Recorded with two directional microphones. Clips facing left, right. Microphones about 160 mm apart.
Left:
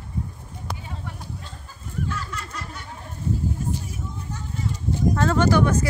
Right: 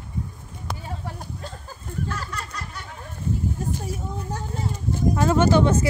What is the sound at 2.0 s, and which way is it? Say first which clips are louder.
Fowl: left 1 dB; 40° right (ahead or behind).